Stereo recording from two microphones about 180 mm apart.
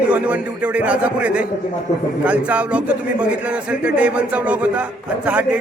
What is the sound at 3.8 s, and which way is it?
Speech, 5° right (ahead or behind).